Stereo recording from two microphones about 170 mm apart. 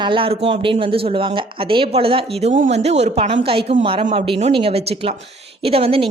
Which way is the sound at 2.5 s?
45° right (ahead or behind).